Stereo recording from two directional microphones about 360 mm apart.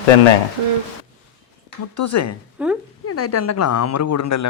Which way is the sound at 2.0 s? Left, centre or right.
Left.